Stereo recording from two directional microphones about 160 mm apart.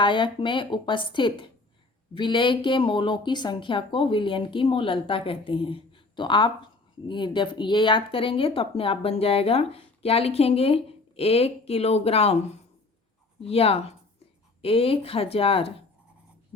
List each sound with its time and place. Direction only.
0.0 s speech: 30° left (ahead or behind)
13.4 s speech: 40° left (ahead or behind)